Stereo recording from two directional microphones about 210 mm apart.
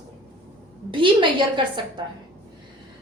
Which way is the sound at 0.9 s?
25° right (ahead or behind).